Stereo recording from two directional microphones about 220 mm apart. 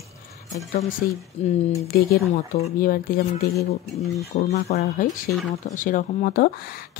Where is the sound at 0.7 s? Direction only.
35° left (ahead or behind).